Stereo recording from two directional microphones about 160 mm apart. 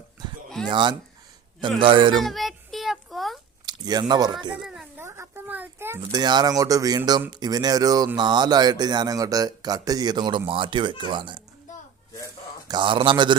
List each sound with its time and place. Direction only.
0.7 s speech: 30° right (ahead or behind)
2.1 s child singing: centre (ahead or behind)
3.7 s speech: 25° right (ahead or behind)
4.5 s a sound: 5° right (ahead or behind)
5.0 s a sound: 15° right (ahead or behind)
6.1 s speech: 25° right (ahead or behind)
12.6 s speech: 30° right (ahead or behind)